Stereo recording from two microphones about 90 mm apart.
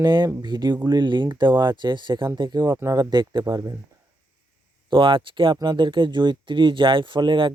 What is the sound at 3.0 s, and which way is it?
Speech, 55° right (ahead or behind).